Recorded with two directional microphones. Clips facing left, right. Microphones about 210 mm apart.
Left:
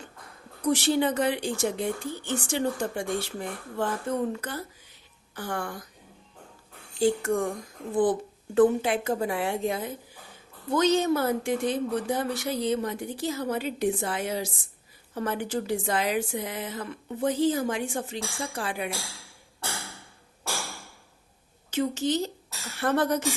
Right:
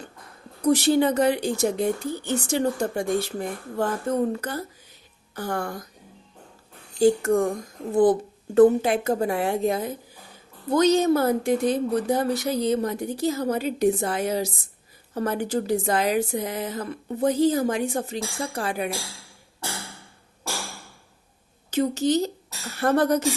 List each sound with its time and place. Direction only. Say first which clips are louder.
0.6 s speech: right 5 dB; 40° right (ahead or behind)
7.0 s speech: right 5 dB; 40° right (ahead or behind)
8.5 s speech: right 5 dB; 40° right (ahead or behind)
21.7 s a woman's voice: right 4 dB; 40° right (ahead or behind)